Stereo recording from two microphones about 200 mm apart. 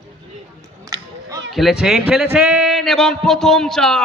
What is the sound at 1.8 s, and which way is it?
Speech, centre (ahead or behind).